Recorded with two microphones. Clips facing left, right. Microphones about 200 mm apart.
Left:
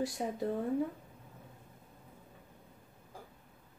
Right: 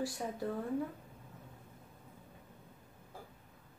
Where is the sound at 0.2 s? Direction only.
20° left (ahead or behind).